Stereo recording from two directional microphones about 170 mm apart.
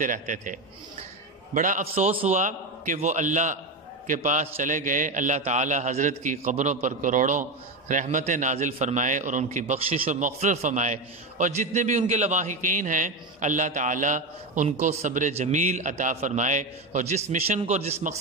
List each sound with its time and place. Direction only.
0.0 s a man's voice: 50° right (ahead or behind)